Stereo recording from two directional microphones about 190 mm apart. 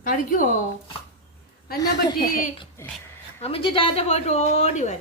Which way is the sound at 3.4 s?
30° left (ahead or behind).